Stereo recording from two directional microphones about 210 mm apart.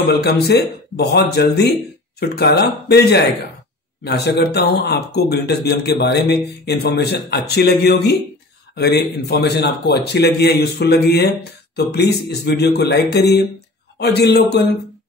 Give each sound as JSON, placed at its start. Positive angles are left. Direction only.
{"t": 0.2, "sound": "a man's voice", "side_deg": 50}